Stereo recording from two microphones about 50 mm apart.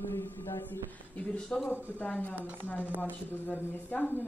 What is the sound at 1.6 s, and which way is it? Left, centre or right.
Speech, left.